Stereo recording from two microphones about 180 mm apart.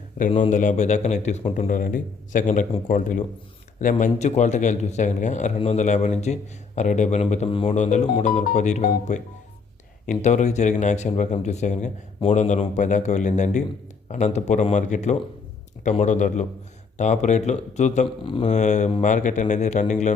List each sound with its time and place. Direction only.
0.2 s a man's voice: 45° left (ahead or behind)
18.2 s speech: 30° left (ahead or behind)
18.4 s speech: 40° left (ahead or behind)